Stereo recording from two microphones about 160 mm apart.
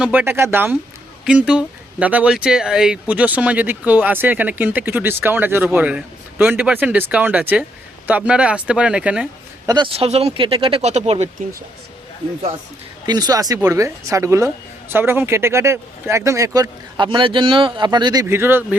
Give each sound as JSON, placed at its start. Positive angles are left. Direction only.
{"t": 0.0, "sound": "speech", "side_deg": -10}
{"t": 9.6, "sound": "speech", "side_deg": -30}
{"t": 13.1, "sound": "speech", "side_deg": -25}